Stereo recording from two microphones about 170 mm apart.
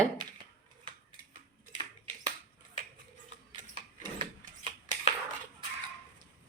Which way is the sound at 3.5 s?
30° right (ahead or behind).